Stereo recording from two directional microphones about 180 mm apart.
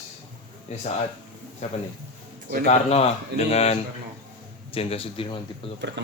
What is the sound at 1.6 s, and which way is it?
Speech, 40° left (ahead or behind).